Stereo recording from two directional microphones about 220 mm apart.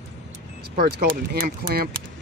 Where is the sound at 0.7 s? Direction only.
40° right (ahead or behind).